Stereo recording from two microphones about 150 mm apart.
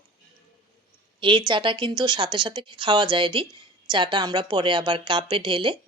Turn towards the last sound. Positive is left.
turn(degrees=-35)  # may be behind; listen again after turning